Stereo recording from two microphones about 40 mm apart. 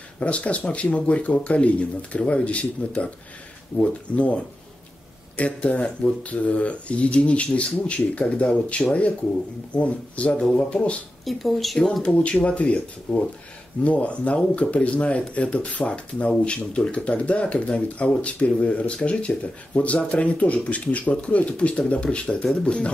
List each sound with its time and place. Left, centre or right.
0.2 s speech: left
10.3 s speech: centre
11.2 s speech: centre
12.0 s speech: left
22.4 s speech: centre